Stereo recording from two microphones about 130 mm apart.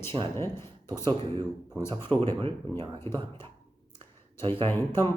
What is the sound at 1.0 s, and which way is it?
Speech, 35° right (ahead or behind).